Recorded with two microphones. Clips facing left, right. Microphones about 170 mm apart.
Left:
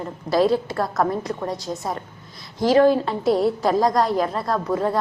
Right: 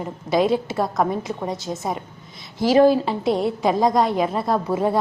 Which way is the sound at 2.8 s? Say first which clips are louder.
Right 4 dB; 5° right (ahead or behind).